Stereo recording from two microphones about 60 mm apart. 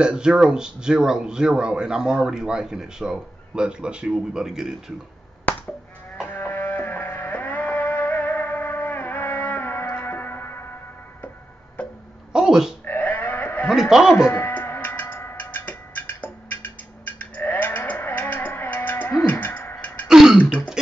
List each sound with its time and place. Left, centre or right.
0.0 s a man's voice: centre
6.3 s music: left
12.3 s a sound: centre
12.8 s sheep: left
13.7 s a sound: centre
14.1 s music: left
14.5 s tick-tock: left
19.2 s a sound: left
20.1 s throat clearing: centre